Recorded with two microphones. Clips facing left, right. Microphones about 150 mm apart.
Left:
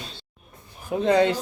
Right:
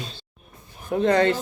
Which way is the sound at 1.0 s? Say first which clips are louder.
Even; 10° left (ahead or behind).